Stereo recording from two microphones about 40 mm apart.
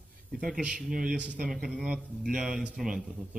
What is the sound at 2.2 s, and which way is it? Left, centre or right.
Speech, centre.